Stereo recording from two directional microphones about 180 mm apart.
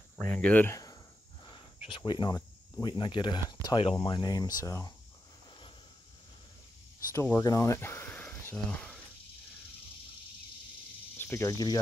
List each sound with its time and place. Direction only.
0.2 s speech: 10° left (ahead or behind)
1.5 s speech: 25° left (ahead or behind)
7.1 s speech: 15° left (ahead or behind)
11.1 s speech: 15° left (ahead or behind)